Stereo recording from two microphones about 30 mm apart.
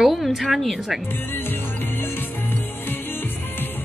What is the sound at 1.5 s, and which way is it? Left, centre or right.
Music, left.